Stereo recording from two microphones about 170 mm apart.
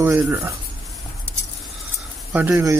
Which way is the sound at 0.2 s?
15° right (ahead or behind).